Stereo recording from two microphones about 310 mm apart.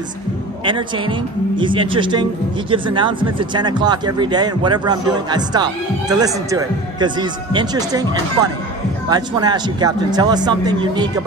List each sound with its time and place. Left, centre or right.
0.7 s speech: centre